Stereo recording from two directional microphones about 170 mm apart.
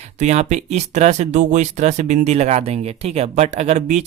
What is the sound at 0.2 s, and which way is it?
Speech, 40° right (ahead or behind).